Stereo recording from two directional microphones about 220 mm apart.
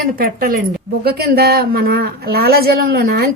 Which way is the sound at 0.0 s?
40° right (ahead or behind).